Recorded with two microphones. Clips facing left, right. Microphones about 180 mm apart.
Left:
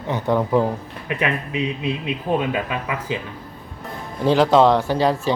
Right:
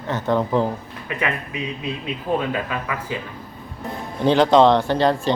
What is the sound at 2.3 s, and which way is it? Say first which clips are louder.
Speech: even; 20° left (ahead or behind).